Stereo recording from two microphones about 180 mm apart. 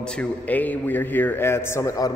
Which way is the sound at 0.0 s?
5° left (ahead or behind).